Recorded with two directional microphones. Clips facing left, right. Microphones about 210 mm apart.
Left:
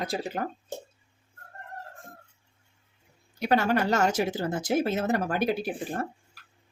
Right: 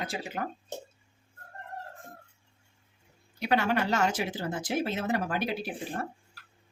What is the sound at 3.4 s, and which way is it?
Speech, 45° left (ahead or behind).